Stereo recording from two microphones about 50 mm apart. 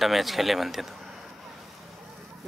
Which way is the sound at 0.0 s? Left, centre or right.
Centre.